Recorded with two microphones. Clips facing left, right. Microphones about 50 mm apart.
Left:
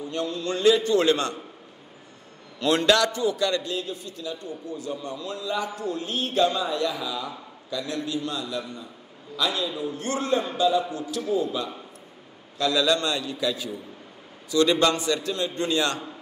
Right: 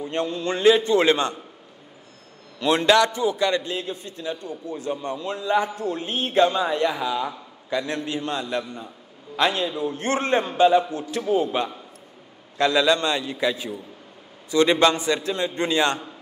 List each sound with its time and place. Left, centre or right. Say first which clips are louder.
0.0 s a man's voice: right 3 dB; right
2.6 s a man's voice: right 3 dB; right